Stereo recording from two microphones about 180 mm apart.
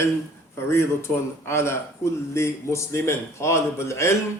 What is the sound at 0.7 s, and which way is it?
A man's voice, 15° left (ahead or behind).